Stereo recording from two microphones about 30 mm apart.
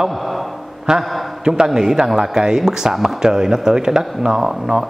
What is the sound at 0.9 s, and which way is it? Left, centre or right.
A man's voice, centre.